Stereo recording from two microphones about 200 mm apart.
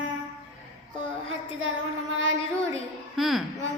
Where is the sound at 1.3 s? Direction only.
80° right.